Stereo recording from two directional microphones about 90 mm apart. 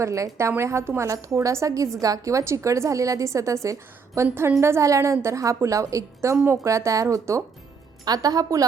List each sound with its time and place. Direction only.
0.0 s a woman's voice: 35° right (ahead or behind)